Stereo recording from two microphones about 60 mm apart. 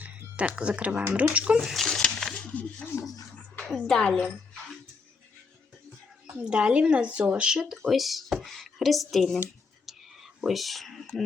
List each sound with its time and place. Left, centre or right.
0.0 s speech: right
1.6 s dog: centre
3.6 s a woman's voice: centre
6.2 s a woman's voice: centre
10.4 s a woman's voice: centre